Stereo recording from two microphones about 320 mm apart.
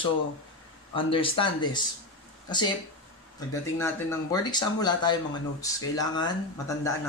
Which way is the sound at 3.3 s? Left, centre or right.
Centre.